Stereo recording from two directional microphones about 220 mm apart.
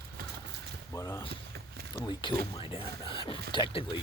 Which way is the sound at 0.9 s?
15° left (ahead or behind).